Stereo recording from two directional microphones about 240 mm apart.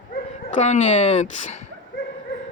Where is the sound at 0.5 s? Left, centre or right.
Left.